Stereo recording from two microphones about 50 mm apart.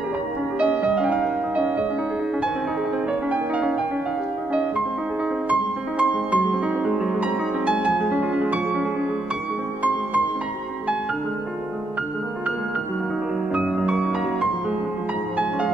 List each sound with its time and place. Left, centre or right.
0.6 s music: right
3.1 s music: right
6.3 s music: right
13.5 s music: right